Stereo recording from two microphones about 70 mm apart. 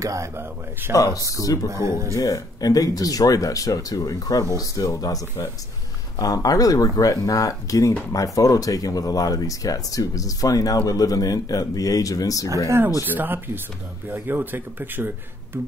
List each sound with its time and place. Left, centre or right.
0.0 s speech: right
0.4 s speech: right
0.9 s speech: left
1.7 s speech: right
2.1 s speech: left
13.0 s speech: right